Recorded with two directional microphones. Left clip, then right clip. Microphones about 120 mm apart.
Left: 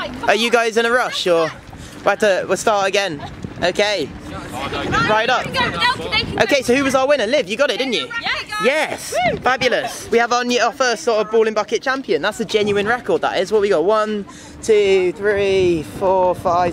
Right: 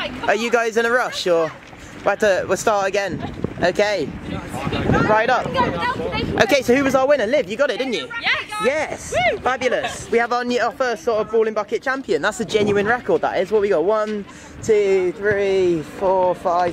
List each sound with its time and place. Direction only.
0.0 s a man's voice: 10° left (ahead or behind)
4.6 s a sound: 40° left (ahead or behind)
5.1 s a man's voice: 10° left (ahead or behind)
5.4 s speech: 45° left (ahead or behind)
6.3 s a man's voice: centre (ahead or behind)
8.2 s a sound: centre (ahead or behind)
8.6 s a man's voice: 15° left (ahead or behind)